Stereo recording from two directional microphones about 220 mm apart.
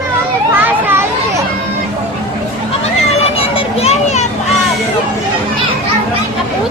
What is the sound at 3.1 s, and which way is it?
Children playing, 25° left (ahead or behind).